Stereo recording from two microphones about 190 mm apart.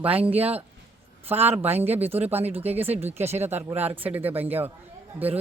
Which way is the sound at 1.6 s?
10° right (ahead or behind).